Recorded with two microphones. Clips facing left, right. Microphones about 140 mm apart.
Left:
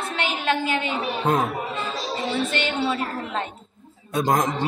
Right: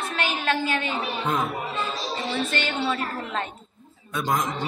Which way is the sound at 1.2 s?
40° left (ahead or behind).